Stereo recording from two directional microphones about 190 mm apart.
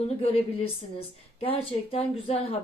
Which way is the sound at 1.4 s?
30° left (ahead or behind).